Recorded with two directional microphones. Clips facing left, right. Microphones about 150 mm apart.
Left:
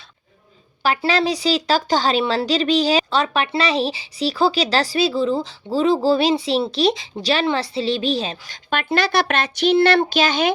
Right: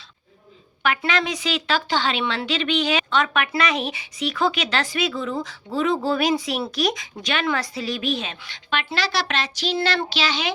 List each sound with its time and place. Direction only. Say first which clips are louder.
0.8 s speech: left 4 dB; 35° left (ahead or behind); by 10.5 s 50° left (ahead or behind)